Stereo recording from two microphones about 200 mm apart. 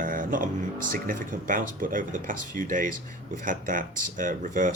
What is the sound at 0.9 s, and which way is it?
Speech, 40° right (ahead or behind).